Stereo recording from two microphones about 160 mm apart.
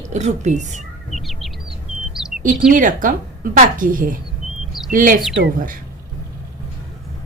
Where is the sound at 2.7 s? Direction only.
55° right (ahead or behind).